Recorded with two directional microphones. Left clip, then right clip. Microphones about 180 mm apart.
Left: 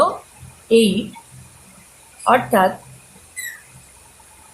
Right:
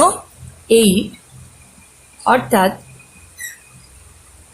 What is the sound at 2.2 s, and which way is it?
Speech, 35° right (ahead or behind).